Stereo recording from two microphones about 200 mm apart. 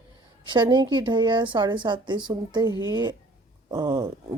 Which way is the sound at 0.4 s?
20° right (ahead or behind).